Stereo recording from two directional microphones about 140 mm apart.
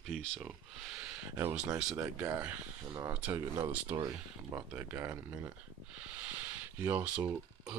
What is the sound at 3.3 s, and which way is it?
Speech, 30° right (ahead or behind).